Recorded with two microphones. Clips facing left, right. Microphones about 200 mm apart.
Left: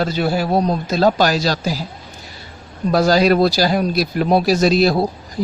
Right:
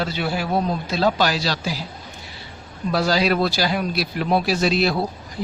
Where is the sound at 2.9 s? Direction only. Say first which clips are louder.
Left 6 dB; 45° left (ahead or behind).